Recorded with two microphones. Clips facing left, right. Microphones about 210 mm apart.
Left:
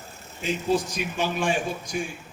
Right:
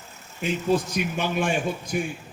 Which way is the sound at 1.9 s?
55° right (ahead or behind).